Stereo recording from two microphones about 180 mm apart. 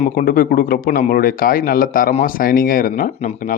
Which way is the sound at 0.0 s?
50° left (ahead or behind).